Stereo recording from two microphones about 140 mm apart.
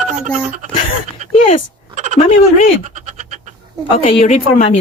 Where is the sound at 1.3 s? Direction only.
50° left (ahead or behind).